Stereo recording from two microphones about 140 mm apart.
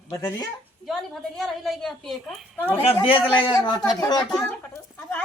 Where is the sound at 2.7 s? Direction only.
45° left (ahead or behind).